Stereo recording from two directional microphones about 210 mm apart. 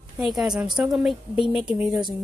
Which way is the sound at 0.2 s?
Centre (ahead or behind).